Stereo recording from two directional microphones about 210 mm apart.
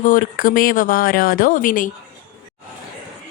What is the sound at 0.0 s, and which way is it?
A woman's voice, 40° left (ahead or behind).